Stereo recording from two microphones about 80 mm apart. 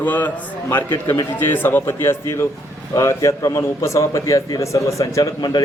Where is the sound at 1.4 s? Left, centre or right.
Left.